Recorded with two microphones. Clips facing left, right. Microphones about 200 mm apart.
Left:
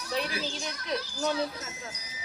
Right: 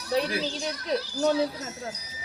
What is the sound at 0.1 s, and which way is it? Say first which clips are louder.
Speech: right 6 dB; 35° right (ahead or behind).